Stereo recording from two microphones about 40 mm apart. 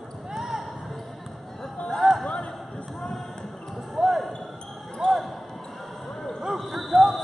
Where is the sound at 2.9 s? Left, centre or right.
Centre.